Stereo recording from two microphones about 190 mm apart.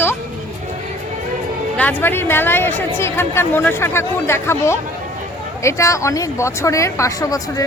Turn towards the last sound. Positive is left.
turn(degrees=20)  # may be behind; listen again after turning